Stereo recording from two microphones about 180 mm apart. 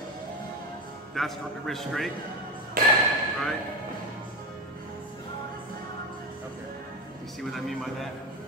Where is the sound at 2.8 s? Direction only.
55° right (ahead or behind).